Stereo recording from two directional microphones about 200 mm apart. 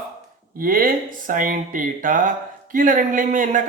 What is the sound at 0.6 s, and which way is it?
A man's voice, 45° right (ahead or behind).